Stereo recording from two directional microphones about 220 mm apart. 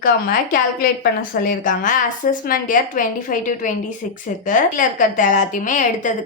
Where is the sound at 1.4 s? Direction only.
35° left (ahead or behind).